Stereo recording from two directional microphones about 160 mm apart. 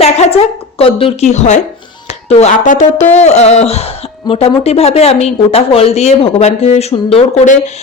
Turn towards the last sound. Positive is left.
turn(degrees=45)  # may be behind; listen again after turning